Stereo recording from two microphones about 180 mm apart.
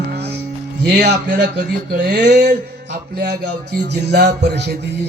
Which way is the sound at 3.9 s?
70° right (ahead or behind).